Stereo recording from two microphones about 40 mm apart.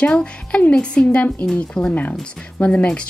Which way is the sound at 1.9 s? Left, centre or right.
Left.